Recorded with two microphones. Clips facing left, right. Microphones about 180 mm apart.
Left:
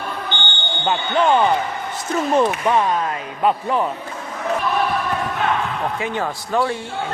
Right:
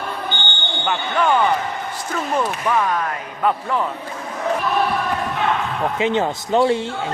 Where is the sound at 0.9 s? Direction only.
25° left (ahead or behind).